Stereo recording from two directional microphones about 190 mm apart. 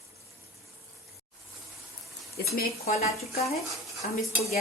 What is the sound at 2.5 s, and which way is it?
Speech, 50° left (ahead or behind).